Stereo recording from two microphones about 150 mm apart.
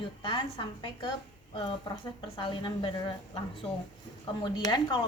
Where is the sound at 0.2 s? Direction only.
30° left (ahead or behind).